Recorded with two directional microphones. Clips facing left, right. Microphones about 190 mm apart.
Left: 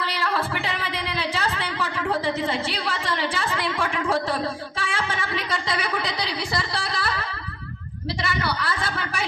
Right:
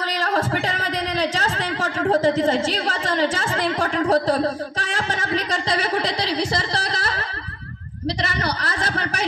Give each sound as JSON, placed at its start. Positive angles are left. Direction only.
{"t": 0.0, "sound": "speech", "side_deg": -40}
{"t": 6.5, "sound": "a sound", "side_deg": -45}
{"t": 8.2, "sound": "a man's voice", "side_deg": -45}